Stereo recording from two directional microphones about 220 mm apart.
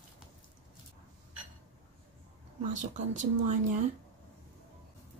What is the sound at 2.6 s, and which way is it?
Speech, 35° right (ahead or behind).